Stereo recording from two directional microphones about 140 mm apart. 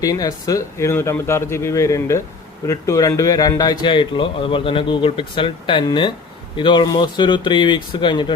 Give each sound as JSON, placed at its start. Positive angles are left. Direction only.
{"t": 0.0, "sound": "speech", "side_deg": 25}